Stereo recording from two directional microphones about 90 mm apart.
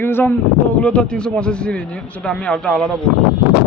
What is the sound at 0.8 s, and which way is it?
Speech, 10° left (ahead or behind).